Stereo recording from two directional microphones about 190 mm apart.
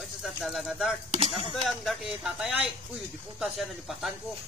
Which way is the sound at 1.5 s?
Centre (ahead or behind).